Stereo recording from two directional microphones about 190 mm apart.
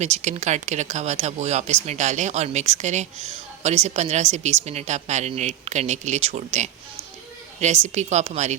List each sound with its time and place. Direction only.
0.0 s speech: 40° right (ahead or behind)